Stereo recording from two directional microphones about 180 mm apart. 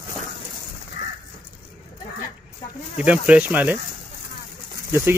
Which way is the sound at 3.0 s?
5° right (ahead or behind).